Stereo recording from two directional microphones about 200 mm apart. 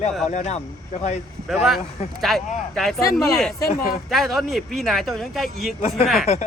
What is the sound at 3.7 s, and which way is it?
Speech, 45° left (ahead or behind).